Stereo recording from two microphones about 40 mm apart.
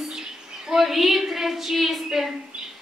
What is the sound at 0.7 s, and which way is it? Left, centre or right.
A woman's voice, centre.